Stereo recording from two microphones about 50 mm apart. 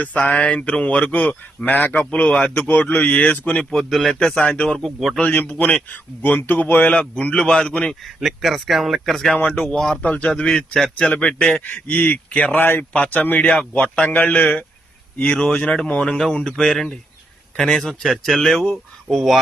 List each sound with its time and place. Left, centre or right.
0.0 s speech: left
3.6 s speech: centre
3.8 s speech: centre
4.4 s speech: left
4.8 s speech: centre
5.9 s speech: left
7.0 s speech: left
8.0 s speech: centre
9.3 s speech: left
11.6 s speech: left
12.5 s speech: left; by 18.8 s centre
19.1 s speech: centre